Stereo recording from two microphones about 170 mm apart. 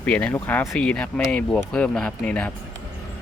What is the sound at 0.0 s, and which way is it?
Speech, 10° left (ahead or behind).